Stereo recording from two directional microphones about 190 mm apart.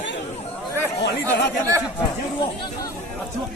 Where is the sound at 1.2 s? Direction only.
15° right (ahead or behind).